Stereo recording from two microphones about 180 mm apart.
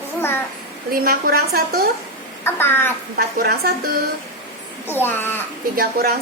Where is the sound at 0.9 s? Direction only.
55° right (ahead or behind).